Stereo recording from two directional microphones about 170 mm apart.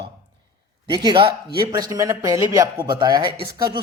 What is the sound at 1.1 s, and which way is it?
A man's voice, 30° right (ahead or behind).